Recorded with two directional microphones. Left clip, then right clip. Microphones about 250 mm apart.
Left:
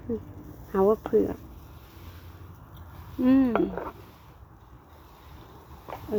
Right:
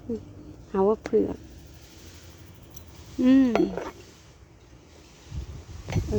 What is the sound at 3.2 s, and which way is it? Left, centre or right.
Cutlery, right.